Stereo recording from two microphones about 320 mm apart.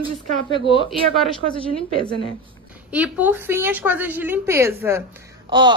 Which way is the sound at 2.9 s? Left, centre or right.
Centre.